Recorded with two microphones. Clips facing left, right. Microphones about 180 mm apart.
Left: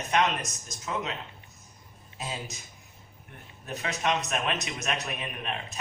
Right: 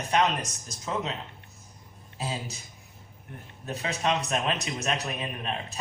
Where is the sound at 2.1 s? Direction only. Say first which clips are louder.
Right 3 dB; 30° right (ahead or behind).